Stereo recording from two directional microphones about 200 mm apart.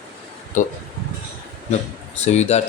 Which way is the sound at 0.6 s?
40° left (ahead or behind).